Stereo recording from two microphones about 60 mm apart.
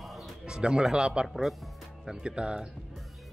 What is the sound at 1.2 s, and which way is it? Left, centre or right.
Speech, centre.